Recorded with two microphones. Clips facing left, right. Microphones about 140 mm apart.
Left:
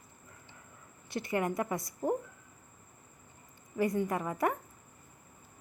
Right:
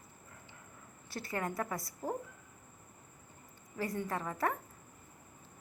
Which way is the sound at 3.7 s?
20° left (ahead or behind).